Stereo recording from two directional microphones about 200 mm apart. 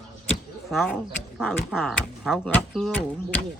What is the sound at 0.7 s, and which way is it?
Speech, centre (ahead or behind).